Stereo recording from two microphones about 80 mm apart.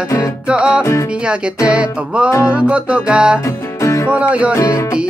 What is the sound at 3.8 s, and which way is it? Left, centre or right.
Music, left.